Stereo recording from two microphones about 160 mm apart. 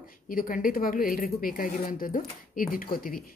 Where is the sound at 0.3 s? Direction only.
60° left (ahead or behind).